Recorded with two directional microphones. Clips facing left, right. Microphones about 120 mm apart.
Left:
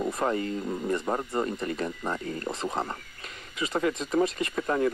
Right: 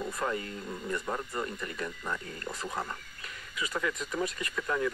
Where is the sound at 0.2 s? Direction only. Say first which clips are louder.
Left 5 dB; 35° left (ahead or behind).